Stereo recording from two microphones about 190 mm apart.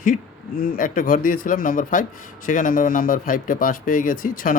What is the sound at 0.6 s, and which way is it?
Speech, 45° left (ahead or behind).